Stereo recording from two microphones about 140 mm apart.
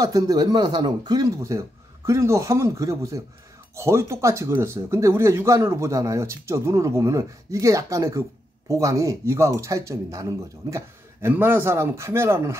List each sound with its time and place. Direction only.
0.0 s a man's voice: 25° right (ahead or behind)